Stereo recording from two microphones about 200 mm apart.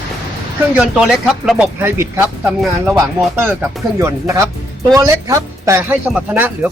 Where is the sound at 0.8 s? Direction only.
5° right (ahead or behind).